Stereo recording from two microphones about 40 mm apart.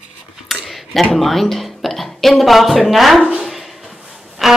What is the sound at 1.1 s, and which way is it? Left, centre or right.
A woman's voice, centre.